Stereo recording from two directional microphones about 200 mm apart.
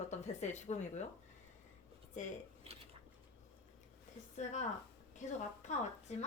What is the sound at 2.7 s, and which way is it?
Dishes, 30° right (ahead or behind).